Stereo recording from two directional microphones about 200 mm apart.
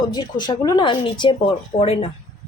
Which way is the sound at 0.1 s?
20° left (ahead or behind).